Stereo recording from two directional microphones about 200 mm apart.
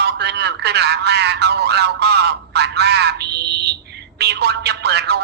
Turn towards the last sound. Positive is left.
turn(degrees=-55)  # may be behind; listen again after turning